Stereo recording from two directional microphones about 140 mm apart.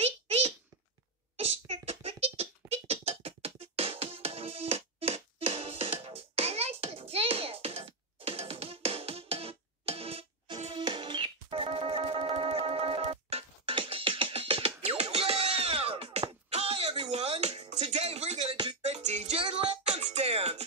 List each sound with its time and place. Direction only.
0.0 s a sound: 45° right (ahead or behind)
1.3 s beatboxing: 45° right (ahead or behind)
17.7 s music: 50° right (ahead or behind)
19.4 s music: 40° right (ahead or behind)
19.8 s music: 55° right (ahead or behind)